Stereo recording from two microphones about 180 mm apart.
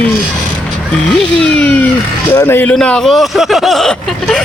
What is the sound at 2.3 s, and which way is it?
Speech, 10° left (ahead or behind).